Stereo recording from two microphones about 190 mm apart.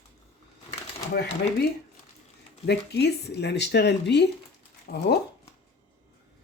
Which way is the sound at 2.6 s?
60° left (ahead or behind).